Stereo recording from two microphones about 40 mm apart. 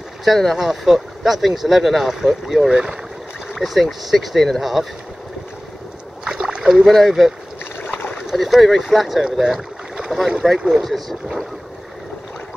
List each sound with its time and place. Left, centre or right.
0.2 s speech: centre
0.6 s speech: centre
6.2 s rowboat: centre
6.9 s speech: centre
10.8 s speech: centre